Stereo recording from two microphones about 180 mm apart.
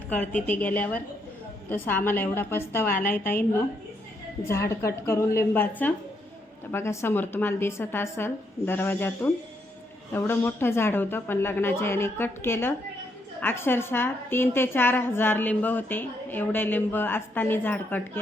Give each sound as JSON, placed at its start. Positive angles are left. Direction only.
{"t": 0.1, "sound": "a woman's voice", "side_deg": 10}
{"t": 2.9, "sound": "a woman's voice", "side_deg": 50}
{"t": 4.4, "sound": "a woman's voice", "side_deg": 15}